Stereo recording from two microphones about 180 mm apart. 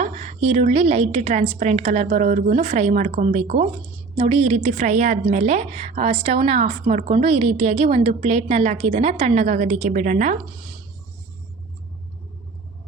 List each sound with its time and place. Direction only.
0.0 s a woman's voice: 40° right (ahead or behind)